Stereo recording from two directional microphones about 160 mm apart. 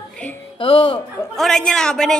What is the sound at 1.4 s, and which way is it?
Speech, 5° left (ahead or behind).